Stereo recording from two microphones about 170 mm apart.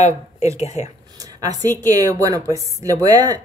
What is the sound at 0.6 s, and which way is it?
Speech, 40° left (ahead or behind).